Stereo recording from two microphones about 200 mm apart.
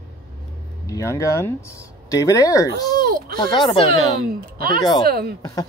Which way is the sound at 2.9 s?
45° right (ahead or behind).